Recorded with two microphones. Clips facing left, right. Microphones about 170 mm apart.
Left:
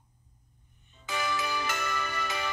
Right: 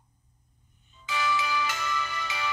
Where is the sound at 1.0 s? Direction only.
50° left (ahead or behind).